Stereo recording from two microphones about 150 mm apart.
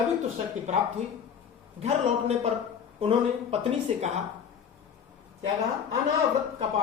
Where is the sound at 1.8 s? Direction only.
45° right (ahead or behind).